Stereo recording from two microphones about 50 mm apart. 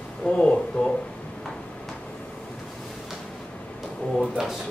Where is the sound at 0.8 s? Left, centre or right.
Left.